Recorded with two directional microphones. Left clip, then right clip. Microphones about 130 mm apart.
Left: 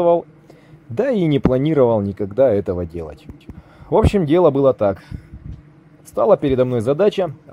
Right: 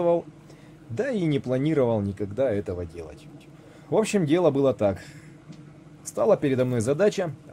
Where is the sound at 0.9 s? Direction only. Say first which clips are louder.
Left 8 dB; 60° left (ahead or behind).